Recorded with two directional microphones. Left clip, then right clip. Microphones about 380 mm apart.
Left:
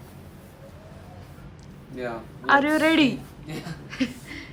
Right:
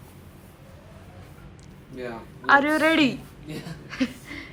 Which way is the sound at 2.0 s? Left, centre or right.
Centre.